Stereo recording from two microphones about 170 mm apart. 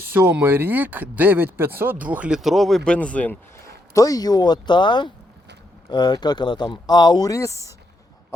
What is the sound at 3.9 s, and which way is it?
Speech, 20° left (ahead or behind).